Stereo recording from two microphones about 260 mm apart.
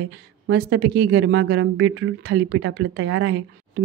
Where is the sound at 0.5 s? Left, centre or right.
Right.